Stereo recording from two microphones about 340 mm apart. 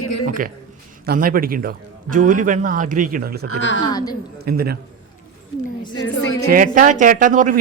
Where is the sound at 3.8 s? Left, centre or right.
Centre.